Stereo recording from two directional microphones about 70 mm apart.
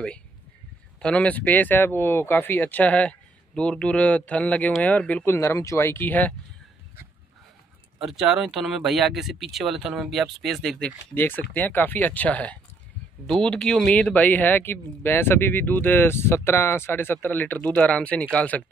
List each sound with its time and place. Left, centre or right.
1.0 s speech: centre
5.2 s speech: left
8.0 s speech: centre
11.1 s speech: left; by 13.9 s centre
13.9 s speech: left